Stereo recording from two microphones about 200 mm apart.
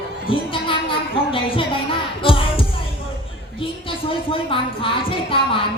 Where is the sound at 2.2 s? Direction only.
25° left (ahead or behind).